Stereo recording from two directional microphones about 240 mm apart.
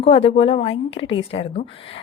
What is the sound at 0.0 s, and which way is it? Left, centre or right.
A woman's voice, left.